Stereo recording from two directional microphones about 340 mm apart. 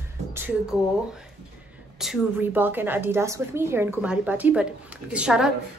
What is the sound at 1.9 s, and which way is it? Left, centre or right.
A woman's voice, centre.